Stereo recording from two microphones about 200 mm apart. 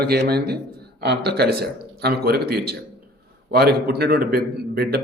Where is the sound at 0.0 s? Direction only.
50° right (ahead or behind).